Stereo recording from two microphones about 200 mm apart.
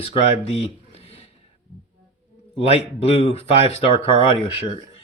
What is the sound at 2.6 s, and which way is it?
Speech, 30° left (ahead or behind).